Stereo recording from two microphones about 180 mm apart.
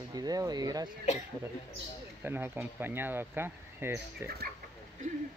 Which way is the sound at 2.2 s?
10° right (ahead or behind).